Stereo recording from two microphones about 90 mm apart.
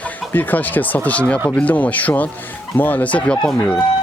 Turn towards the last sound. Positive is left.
turn(degrees=15)  # may be behind; listen again after turning